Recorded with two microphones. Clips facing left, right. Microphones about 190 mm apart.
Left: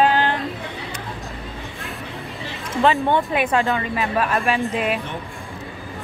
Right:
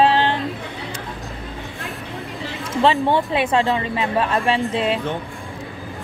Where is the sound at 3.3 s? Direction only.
30° right (ahead or behind).